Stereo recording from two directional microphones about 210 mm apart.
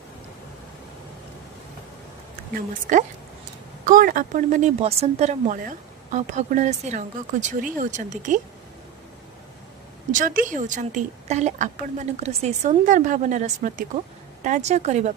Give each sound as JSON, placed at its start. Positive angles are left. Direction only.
{"t": 2.6, "sound": "speech", "side_deg": -40}
{"t": 10.1, "sound": "speech", "side_deg": -40}